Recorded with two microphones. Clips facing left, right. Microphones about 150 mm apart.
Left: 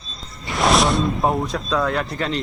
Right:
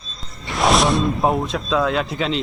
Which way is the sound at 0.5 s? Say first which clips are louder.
Right 1 dB; centre (ahead or behind).